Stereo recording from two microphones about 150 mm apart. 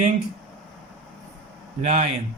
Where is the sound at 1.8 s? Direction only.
50° right (ahead or behind).